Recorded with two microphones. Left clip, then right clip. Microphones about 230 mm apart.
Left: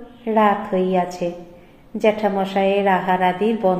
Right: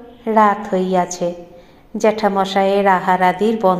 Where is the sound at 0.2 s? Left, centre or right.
Right.